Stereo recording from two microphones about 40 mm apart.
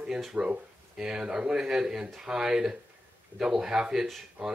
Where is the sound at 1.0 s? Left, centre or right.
Centre.